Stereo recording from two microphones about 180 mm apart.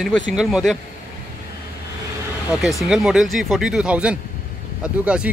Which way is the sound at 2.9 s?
5° right (ahead or behind).